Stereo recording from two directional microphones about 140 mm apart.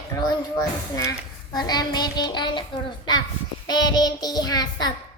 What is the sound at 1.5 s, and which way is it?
A child's voice, 30° left (ahead or behind).